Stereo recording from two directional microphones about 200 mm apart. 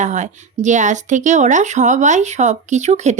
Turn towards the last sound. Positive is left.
turn(degrees=-35)  # may be behind; listen again after turning